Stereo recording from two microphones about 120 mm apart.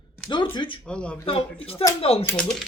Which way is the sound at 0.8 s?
10° left (ahead or behind).